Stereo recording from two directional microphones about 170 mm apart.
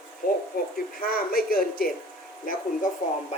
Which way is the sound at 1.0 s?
60° left (ahead or behind).